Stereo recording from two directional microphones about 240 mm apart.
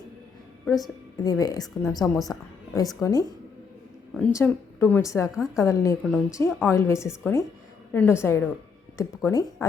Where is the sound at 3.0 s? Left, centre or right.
Centre.